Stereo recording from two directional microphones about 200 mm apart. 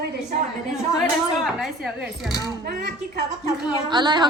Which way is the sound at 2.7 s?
50° right (ahead or behind).